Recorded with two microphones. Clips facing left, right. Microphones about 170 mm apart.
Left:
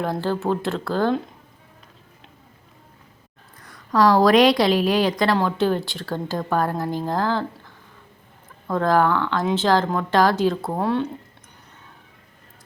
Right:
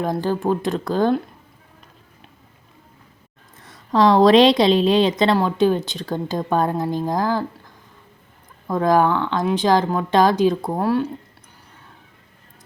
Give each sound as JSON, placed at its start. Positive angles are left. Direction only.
{"t": 0.0, "sound": "speech", "side_deg": -15}
{"t": 3.6, "sound": "a woman's voice", "side_deg": -25}
{"t": 8.6, "sound": "speech", "side_deg": -15}
{"t": 10.8, "sound": "speech", "side_deg": -5}